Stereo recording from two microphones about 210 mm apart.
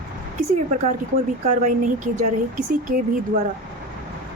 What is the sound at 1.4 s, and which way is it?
Speech, 35° right (ahead or behind).